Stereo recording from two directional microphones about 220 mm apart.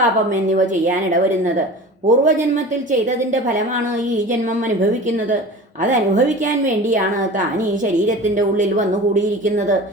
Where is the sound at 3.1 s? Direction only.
35° right (ahead or behind).